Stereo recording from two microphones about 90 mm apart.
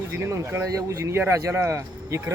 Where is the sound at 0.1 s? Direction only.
30° right (ahead or behind).